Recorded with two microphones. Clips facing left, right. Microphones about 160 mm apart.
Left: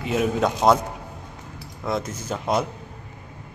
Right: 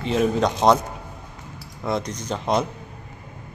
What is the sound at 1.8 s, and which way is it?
Speech, 5° left (ahead or behind).